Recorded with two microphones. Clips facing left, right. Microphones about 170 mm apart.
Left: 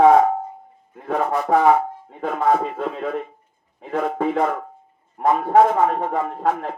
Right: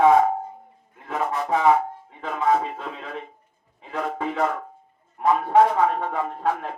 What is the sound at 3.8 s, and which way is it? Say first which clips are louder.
A man's voice: left 6 dB; 55° left (ahead or behind).